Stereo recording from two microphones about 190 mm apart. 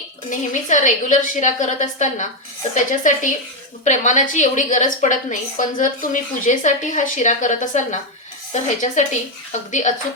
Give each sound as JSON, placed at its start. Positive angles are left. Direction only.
{"t": 0.3, "sound": "a woman's voice", "side_deg": 40}